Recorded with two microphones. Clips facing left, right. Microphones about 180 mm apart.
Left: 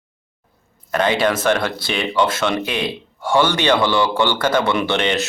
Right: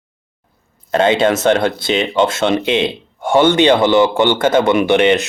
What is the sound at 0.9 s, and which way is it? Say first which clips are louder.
Speech: right 5 dB; 25° right (ahead or behind).